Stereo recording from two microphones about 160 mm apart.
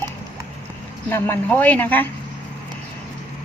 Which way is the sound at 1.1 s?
15° left (ahead or behind).